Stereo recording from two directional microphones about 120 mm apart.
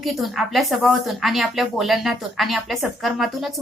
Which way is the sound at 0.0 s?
Centre (ahead or behind).